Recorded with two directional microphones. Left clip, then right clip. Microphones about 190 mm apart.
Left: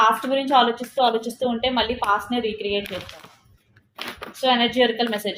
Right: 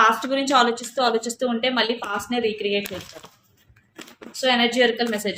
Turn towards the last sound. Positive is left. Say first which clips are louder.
# even
turn(degrees=-30)  # may be behind; listen again after turning